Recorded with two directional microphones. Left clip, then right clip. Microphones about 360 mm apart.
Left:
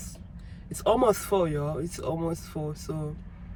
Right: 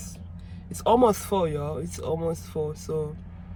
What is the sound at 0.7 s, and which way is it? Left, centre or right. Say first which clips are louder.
Speech: right 3 dB; centre.